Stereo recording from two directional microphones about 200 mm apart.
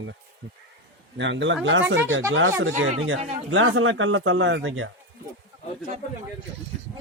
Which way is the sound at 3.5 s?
85° right.